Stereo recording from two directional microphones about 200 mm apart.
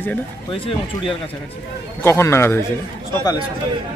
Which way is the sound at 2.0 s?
15° left (ahead or behind).